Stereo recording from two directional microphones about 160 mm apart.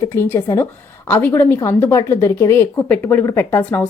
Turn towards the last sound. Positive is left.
turn(degrees=10)  # may be behind; listen again after turning